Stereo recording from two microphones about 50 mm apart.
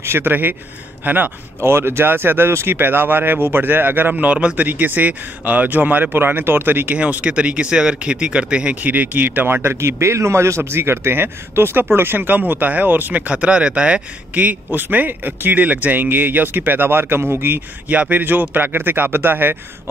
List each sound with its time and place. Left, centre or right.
0.0 s speech: right
1.6 s speech: right
4.1 s speech: right
7.0 s speech: right
8.8 s speech: right
13.3 s speech: right
14.3 s speech: right
18.1 s speech: right